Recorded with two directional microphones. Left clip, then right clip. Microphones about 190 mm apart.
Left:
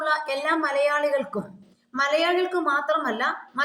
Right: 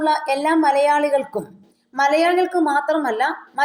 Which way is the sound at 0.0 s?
20° right (ahead or behind).